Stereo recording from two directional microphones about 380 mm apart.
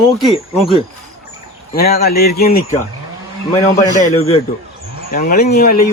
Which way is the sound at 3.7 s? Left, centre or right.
Centre.